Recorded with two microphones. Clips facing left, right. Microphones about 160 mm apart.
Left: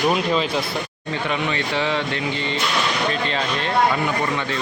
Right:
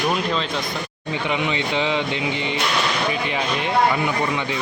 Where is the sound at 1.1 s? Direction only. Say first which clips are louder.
Even; 15° right (ahead or behind).